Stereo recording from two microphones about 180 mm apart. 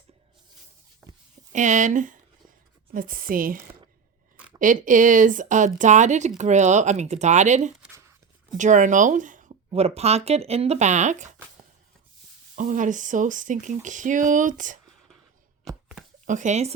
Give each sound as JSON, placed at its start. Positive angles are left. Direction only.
{"t": 1.5, "sound": "speech", "side_deg": -45}
{"t": 4.6, "sound": "speech", "side_deg": -45}
{"t": 12.5, "sound": "speech", "side_deg": -45}
{"t": 16.2, "sound": "speech", "side_deg": -45}